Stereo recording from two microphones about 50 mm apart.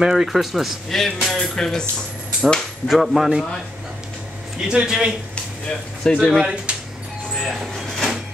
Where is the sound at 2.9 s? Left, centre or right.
Centre.